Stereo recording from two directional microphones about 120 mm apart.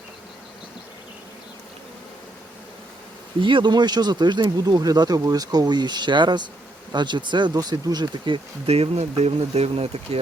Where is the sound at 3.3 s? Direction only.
45° right (ahead or behind).